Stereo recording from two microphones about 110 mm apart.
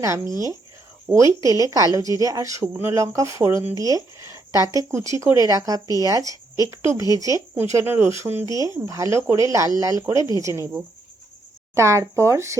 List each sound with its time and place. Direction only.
0.0 s a woman's voice: 25° right (ahead or behind)
11.7 s a woman's voice: 25° right (ahead or behind)